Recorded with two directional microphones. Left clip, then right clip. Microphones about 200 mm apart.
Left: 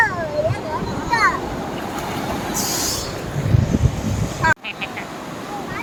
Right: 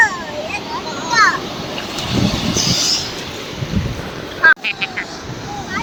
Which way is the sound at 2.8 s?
60° left (ahead or behind).